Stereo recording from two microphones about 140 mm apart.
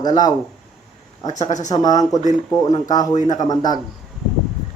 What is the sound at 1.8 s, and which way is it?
Speech, 25° left (ahead or behind).